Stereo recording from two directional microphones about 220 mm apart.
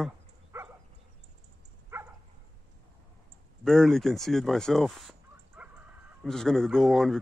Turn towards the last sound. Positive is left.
turn(degrees=0)  # may be behind; listen again after turning